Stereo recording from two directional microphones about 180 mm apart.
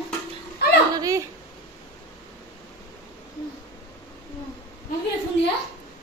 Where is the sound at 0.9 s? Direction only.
20° right (ahead or behind).